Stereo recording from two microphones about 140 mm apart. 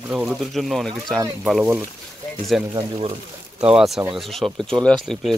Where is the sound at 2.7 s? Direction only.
40° right (ahead or behind).